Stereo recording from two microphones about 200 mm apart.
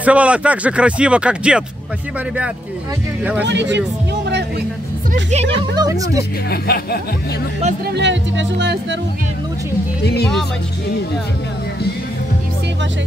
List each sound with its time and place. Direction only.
0.0 s speech: 5° right (ahead or behind)
3.4 s speech: 60° right (ahead or behind)
5.8 s speech: 15° right (ahead or behind)
6.5 s speech: 50° left (ahead or behind)
7.8 s speech: 60° right (ahead or behind)
10.0 s speech: 55° left (ahead or behind)